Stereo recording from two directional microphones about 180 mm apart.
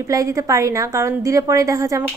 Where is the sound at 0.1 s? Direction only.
20° right (ahead or behind).